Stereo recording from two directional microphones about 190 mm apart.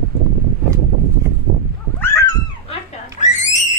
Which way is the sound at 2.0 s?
15° left (ahead or behind).